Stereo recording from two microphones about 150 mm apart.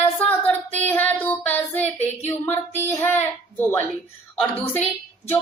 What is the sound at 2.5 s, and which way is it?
Speech, 15° left (ahead or behind).